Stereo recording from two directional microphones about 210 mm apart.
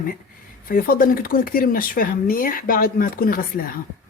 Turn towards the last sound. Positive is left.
turn(degrees=45)  # may be behind; listen again after turning